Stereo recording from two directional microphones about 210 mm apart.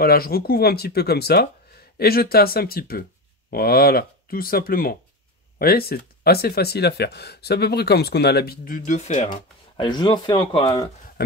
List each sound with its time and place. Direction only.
0.0 s speech: 45° left (ahead or behind); by 10.9 s 20° left (ahead or behind)